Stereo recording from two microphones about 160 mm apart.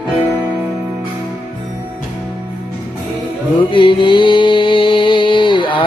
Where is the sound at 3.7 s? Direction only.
30° left (ahead or behind).